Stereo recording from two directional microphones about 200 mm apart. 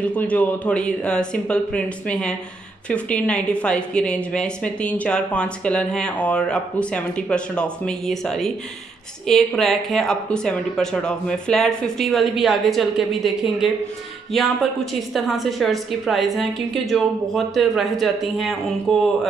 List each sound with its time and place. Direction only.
0.0 s speech: 5° left (ahead or behind)